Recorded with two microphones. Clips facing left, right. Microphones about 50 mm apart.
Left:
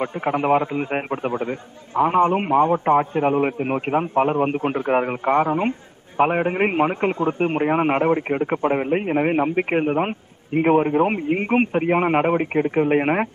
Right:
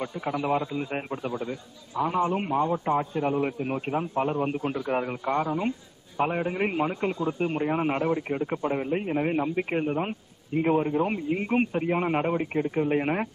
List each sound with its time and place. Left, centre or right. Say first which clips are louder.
0.0 s a man's voice: left 7 dB; left